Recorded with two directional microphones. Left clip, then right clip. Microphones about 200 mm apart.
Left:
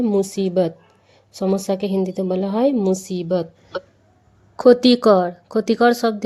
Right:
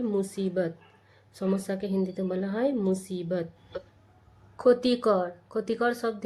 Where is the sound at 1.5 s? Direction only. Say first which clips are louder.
Left 11 dB; 35° left (ahead or behind).